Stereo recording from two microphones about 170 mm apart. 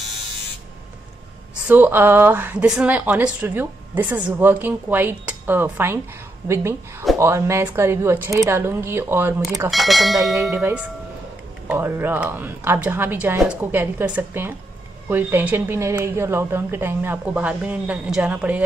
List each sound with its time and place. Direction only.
1.7 s a woman's voice: 10° right (ahead or behind)
9.7 s speech: centre (ahead or behind)
10.3 s a woman's voice: 15° right (ahead or behind)